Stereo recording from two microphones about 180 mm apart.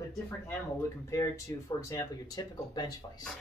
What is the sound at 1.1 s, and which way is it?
Speech, 15° left (ahead or behind).